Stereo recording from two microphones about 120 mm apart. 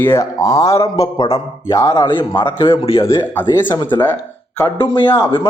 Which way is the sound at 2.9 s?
25° left (ahead or behind).